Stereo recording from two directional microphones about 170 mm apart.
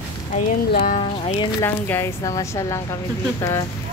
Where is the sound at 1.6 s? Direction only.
15° left (ahead or behind).